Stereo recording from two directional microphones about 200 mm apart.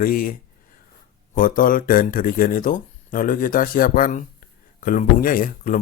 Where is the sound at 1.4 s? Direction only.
45° left (ahead or behind).